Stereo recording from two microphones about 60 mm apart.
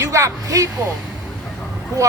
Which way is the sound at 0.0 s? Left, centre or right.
Right.